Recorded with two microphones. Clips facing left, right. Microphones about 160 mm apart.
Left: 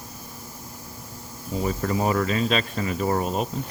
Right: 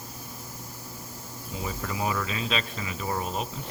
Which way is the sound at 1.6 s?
45° left (ahead or behind).